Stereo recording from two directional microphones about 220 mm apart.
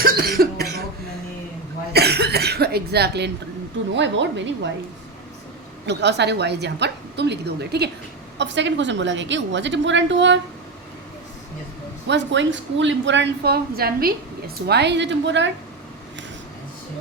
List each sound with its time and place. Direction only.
0.0 s cough: 40° right (ahead or behind)
1.9 s cough: 45° right (ahead or behind)
3.9 s a woman's voice: 55° right (ahead or behind)
5.8 s a woman's voice: 50° right (ahead or behind)
12.0 s a woman's voice: 55° right (ahead or behind)